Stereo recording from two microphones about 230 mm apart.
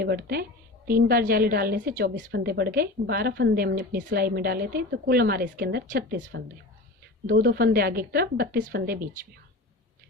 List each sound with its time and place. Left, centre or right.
0.0 s a woman's voice: right